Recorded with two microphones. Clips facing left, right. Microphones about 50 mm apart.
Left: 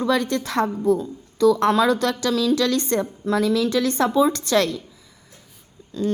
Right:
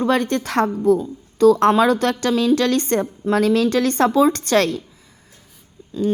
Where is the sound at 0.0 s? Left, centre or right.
Right.